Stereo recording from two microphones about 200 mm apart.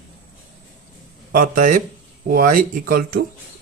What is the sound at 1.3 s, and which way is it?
Speech, 45° right (ahead or behind).